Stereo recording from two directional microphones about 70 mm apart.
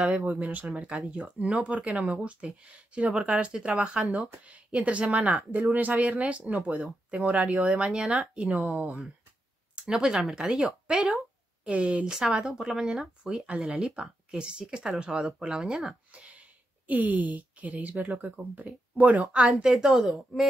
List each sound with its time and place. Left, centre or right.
0.7 s speech: centre
3.1 s speech: centre
7.2 s speech: centre
15.9 s a sound: centre
18.1 s speech: right
19.4 s speech: centre